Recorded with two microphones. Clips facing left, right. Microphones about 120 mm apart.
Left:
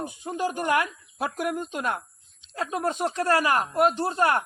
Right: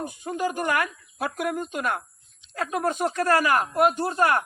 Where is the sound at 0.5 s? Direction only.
25° left (ahead or behind).